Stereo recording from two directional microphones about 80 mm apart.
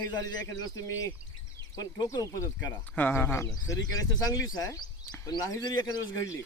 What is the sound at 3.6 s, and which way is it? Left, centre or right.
A man's voice, left.